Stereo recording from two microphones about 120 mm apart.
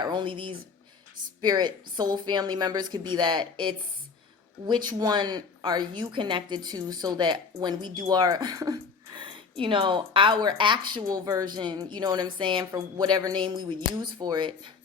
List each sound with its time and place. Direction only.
0.0 s a woman's voice: 40° right (ahead or behind)